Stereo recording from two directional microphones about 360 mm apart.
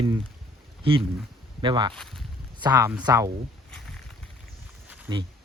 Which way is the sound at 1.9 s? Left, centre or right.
Centre.